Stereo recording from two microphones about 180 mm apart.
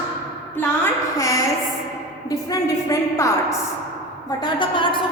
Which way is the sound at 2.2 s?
20° left (ahead or behind).